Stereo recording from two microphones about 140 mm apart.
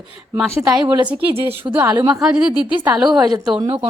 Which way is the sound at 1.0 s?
10° right (ahead or behind).